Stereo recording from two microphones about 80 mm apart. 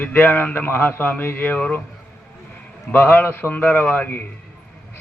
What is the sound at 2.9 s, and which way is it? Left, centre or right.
Speech, left.